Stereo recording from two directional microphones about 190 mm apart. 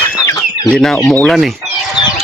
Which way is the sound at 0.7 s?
Centre (ahead or behind).